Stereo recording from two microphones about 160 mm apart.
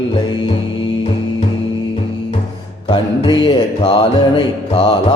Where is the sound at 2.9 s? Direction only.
30° left (ahead or behind).